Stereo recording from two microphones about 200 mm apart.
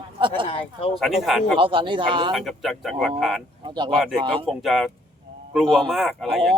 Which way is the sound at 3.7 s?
20° right (ahead or behind).